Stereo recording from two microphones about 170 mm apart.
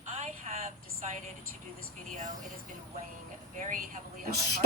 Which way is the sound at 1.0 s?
45° right (ahead or behind).